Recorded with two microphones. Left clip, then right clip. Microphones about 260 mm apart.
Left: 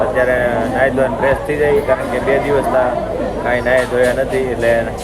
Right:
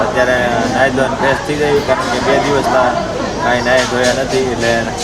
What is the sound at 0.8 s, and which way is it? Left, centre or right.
Speech, right.